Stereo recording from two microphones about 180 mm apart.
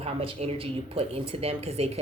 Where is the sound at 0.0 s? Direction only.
35° right (ahead or behind).